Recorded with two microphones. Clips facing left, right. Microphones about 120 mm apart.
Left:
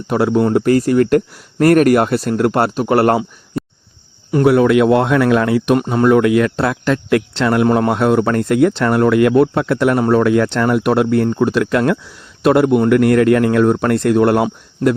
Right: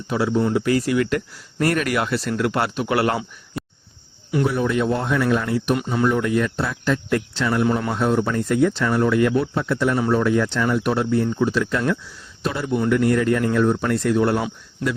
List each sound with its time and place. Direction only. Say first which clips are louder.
0.1 s speech: left 6 dB; 55° left (ahead or behind)
3.6 s a sound: left 8 dB; centre (ahead or behind)
4.4 s speech: left 11 dB; 85° left
5.8 s speech: left 6 dB; 50° left (ahead or behind)
6.1 s speech: left 10 dB; 75° left (ahead or behind)